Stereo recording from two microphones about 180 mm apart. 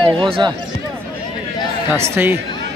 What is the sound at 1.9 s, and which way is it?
Speech, 15° right (ahead or behind).